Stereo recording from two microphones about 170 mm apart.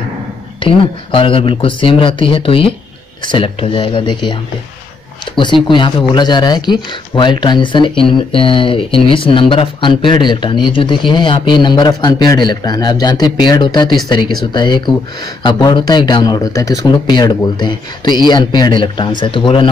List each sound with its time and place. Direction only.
0.6 s speech: 30° left (ahead or behind)